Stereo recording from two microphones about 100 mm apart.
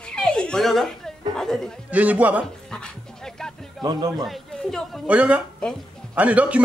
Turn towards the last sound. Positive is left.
turn(degrees=-15)  # may be behind; listen again after turning